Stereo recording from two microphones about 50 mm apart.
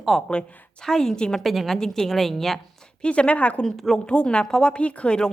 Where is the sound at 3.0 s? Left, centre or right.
Left.